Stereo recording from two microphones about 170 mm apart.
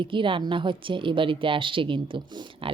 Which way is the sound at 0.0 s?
30° right (ahead or behind).